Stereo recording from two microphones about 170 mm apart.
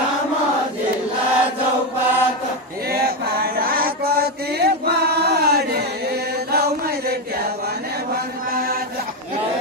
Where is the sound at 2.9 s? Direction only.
65° right (ahead or behind).